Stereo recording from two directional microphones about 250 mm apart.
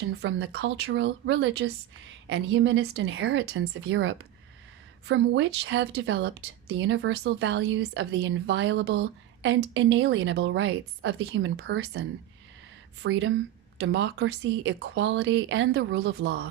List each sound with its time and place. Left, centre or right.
0.0 s a woman's voice: right